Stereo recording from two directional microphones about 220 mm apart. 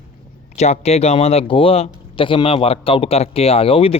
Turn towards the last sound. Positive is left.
turn(degrees=25)  # may be behind; listen again after turning